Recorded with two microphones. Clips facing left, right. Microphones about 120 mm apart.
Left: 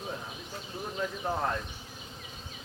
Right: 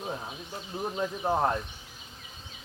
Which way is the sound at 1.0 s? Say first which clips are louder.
Right 4 dB; 25° right (ahead or behind).